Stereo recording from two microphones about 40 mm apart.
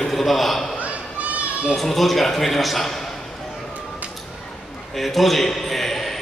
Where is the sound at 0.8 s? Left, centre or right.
Right.